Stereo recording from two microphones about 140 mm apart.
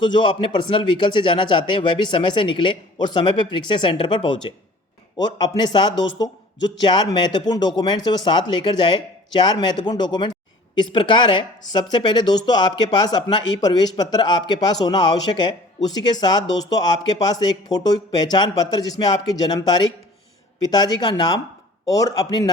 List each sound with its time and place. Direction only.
0.0 s speech: 35° left (ahead or behind)